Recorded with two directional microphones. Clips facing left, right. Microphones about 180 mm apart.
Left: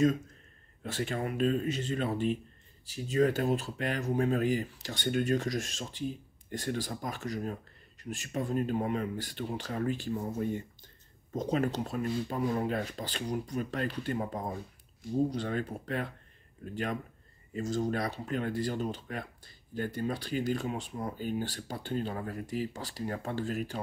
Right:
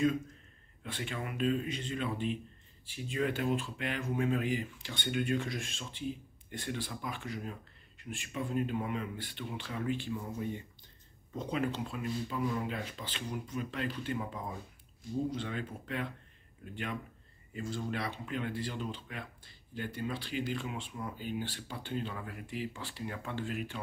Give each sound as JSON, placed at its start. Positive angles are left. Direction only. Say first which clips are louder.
{"t": 0.8, "sound": "speech", "louder": "left 6 dB", "side_deg": 40}